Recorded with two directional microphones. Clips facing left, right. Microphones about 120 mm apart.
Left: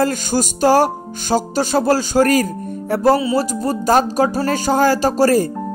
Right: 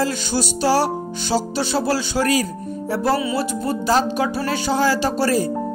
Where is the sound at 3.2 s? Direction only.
35° left (ahead or behind).